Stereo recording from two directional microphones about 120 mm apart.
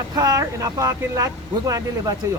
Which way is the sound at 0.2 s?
30° right (ahead or behind).